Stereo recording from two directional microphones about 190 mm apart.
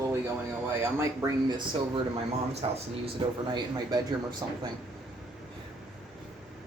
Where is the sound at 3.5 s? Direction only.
20° right (ahead or behind).